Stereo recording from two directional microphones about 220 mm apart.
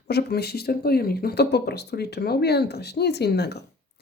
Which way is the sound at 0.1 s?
45° left (ahead or behind).